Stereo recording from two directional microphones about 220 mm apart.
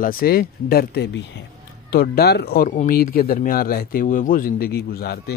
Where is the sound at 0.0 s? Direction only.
40° left (ahead or behind).